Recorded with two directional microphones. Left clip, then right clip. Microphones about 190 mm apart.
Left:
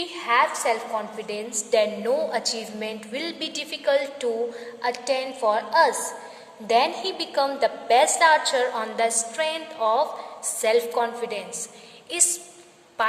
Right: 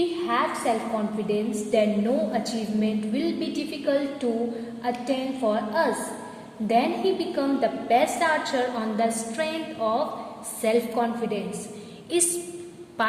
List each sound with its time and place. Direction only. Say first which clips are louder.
0.3 s a woman's voice: left 7 dB; 25° left (ahead or behind)